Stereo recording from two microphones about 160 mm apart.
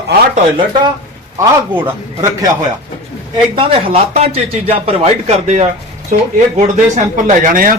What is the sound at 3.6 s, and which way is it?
Speech, 35° right (ahead or behind).